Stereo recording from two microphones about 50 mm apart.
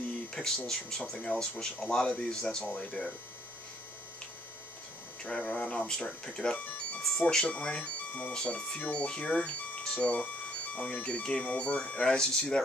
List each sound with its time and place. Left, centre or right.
0.3 s a sound: centre
0.7 s speech: centre
5.2 s speech: centre